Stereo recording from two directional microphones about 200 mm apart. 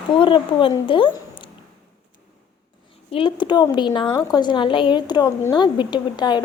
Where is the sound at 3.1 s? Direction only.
25° left (ahead or behind).